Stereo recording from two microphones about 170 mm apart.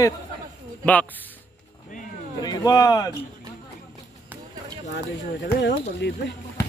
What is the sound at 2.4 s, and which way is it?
Speech, 25° left (ahead or behind).